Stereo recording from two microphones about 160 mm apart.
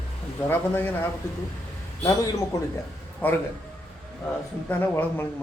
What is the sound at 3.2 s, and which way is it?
Speech, 10° left (ahead or behind).